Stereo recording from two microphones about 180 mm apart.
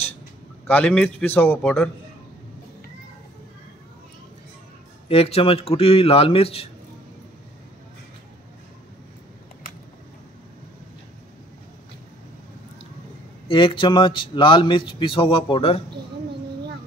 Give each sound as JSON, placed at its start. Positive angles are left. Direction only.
{"t": 0.7, "sound": "a man's voice", "side_deg": 5}
{"t": 5.0, "sound": "a man's voice", "side_deg": 35}
{"t": 13.5, "sound": "a man's voice", "side_deg": 30}